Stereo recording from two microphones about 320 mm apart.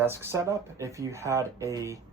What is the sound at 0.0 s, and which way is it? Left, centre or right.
Speech, centre.